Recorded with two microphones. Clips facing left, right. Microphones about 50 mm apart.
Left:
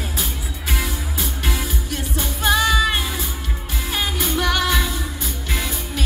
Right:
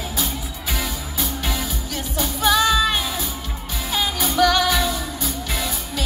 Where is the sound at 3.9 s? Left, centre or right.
Centre.